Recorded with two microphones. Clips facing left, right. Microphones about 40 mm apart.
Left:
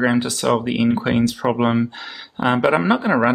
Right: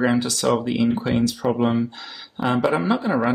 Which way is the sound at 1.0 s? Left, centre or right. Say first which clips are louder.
Left 2 dB; left.